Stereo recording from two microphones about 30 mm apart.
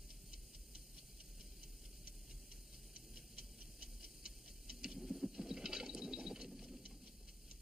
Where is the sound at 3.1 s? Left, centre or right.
Centre.